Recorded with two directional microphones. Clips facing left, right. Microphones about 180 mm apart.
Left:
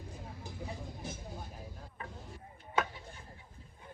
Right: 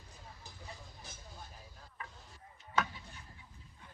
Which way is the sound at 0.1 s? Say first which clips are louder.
Left 5 dB; 50° left (ahead or behind).